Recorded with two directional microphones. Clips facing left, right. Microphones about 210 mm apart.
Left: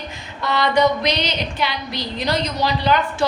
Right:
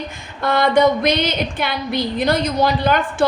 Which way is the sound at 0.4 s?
50° right (ahead or behind).